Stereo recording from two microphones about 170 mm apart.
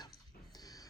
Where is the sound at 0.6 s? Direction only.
20° left (ahead or behind).